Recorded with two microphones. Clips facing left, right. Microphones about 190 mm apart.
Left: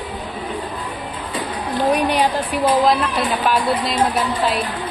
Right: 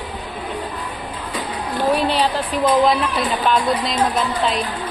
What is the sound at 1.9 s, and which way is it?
A woman's voice, 15° left (ahead or behind).